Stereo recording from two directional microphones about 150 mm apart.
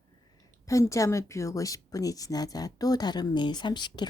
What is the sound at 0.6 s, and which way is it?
A woman's voice, 20° left (ahead or behind).